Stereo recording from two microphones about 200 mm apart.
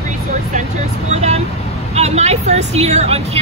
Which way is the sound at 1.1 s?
35° right (ahead or behind).